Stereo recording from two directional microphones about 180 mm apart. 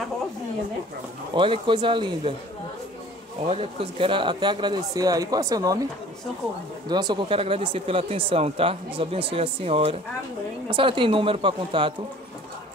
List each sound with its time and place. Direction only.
1.3 s speech: 25° right (ahead or behind)
3.4 s speech: 30° right (ahead or behind)
6.9 s speech: 25° right (ahead or behind)